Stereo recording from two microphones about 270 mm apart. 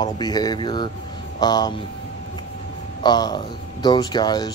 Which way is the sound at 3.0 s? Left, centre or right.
Centre.